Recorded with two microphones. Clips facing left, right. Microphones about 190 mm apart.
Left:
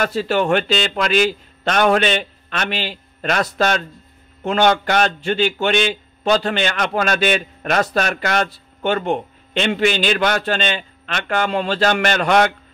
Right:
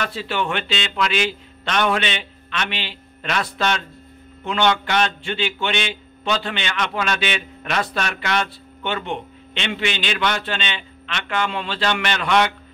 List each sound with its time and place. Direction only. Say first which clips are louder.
0.0 s a man's voice: left 6 dB; 45° left (ahead or behind)